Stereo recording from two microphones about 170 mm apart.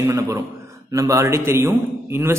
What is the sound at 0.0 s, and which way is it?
A man's voice, 15° right (ahead or behind).